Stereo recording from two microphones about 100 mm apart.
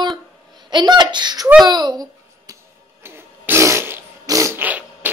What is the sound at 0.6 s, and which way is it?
Speech, 45° right (ahead or behind).